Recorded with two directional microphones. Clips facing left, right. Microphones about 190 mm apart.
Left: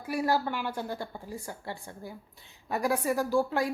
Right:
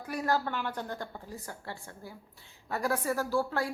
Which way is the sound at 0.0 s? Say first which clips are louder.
Left 3 dB; 10° left (ahead or behind).